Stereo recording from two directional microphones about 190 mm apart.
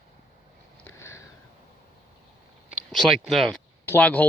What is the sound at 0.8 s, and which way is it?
Sniff, 15° left (ahead or behind).